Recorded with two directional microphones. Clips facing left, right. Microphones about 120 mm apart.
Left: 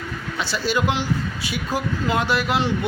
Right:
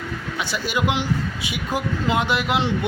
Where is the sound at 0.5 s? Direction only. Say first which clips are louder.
Left 1 dB; 15° right (ahead or behind).